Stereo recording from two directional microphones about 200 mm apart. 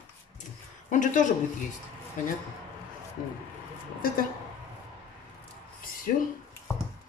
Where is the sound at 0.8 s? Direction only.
40° left (ahead or behind).